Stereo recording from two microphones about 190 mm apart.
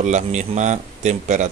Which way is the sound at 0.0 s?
40° right (ahead or behind).